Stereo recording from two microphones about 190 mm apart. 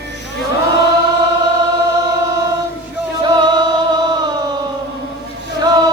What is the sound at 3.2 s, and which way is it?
Music, 20° right (ahead or behind).